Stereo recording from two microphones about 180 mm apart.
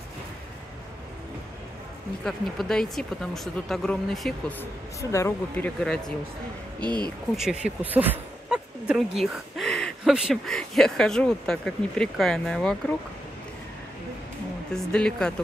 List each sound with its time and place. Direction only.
2.2 s speech: 5° left (ahead or behind)
6.8 s speech: 25° right (ahead or behind)
7.3 s speech: 5° right (ahead or behind)
14.7 s speech: 5° left (ahead or behind)